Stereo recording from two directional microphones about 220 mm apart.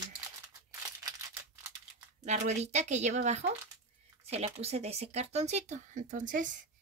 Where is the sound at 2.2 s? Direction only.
30° right (ahead or behind).